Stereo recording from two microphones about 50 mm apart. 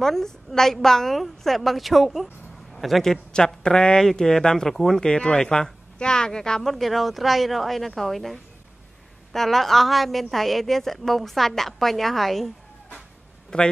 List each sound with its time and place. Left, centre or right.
0.0 s a woman's voice: centre
6.7 s a woman's voice: centre
13.5 s speech: centre